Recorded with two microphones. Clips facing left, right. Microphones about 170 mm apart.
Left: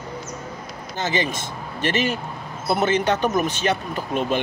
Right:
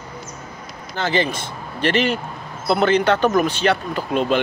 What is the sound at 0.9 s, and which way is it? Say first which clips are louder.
Speech: right 3 dB; 20° left (ahead or behind).